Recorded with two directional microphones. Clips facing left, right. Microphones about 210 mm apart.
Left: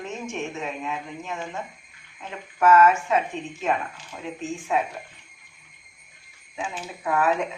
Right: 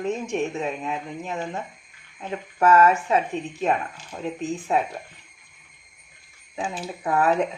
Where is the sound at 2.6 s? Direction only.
35° right (ahead or behind).